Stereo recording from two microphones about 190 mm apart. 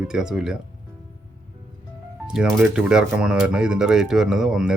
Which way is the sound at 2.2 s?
5° right (ahead or behind).